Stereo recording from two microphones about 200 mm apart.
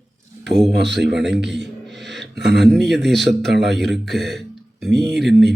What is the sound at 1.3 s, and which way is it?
Speech, 60° right (ahead or behind).